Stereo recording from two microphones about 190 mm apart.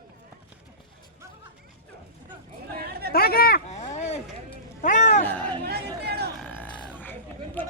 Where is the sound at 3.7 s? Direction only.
35° left (ahead or behind).